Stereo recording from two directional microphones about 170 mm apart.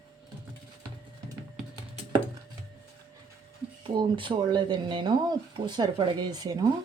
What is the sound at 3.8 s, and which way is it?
Speech, 30° right (ahead or behind).